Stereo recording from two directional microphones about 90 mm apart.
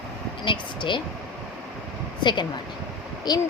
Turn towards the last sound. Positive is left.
turn(degrees=50)  # may be behind; listen again after turning